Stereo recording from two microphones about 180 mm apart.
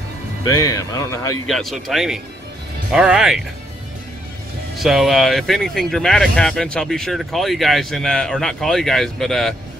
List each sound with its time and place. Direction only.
0.5 s speech: 20° left (ahead or behind)
1.5 s speech: centre (ahead or behind)
4.7 s speech: centre (ahead or behind)